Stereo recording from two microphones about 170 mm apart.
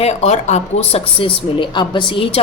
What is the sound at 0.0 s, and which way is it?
Speech, 40° left (ahead or behind).